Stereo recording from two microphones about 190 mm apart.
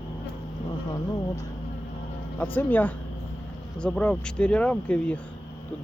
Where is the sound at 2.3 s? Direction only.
10° left (ahead or behind).